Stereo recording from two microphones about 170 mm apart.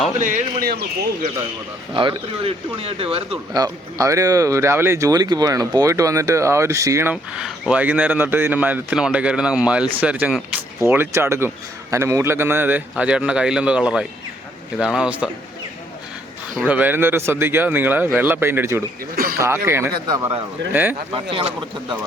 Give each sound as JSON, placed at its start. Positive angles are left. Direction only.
{"t": 0.2, "sound": "speech", "side_deg": -45}
{"t": 1.9, "sound": "speech", "side_deg": -30}
{"t": 3.5, "sound": "speech", "side_deg": -20}
{"t": 16.6, "sound": "speech", "side_deg": -10}
{"t": 19.1, "sound": "speech", "side_deg": -60}
{"t": 19.4, "sound": "speech", "side_deg": -15}
{"t": 21.1, "sound": "speech", "side_deg": -30}